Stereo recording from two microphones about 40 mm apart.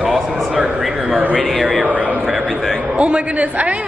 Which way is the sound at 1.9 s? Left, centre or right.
Right.